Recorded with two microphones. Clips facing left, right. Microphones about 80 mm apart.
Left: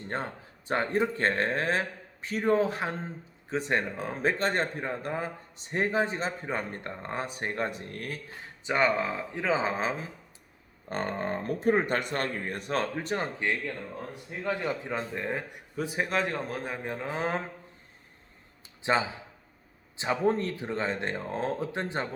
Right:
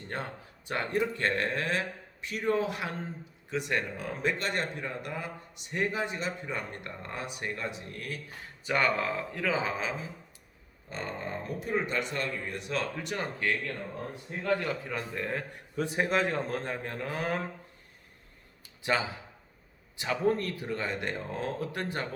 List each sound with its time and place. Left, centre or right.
0.7 s a man's voice: left
8.6 s speech: left
10.8 s speech: left; by 15.6 s centre
15.7 s a man's voice: centre; by 17.4 s left
18.8 s a man's voice: left